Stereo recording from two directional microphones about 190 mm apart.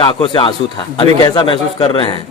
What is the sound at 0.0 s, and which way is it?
A man's voice, 25° left (ahead or behind).